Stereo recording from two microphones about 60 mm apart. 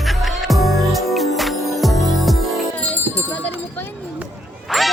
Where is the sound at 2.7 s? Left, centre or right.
Left.